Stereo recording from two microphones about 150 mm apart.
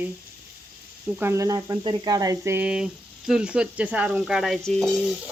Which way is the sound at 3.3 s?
5° right (ahead or behind).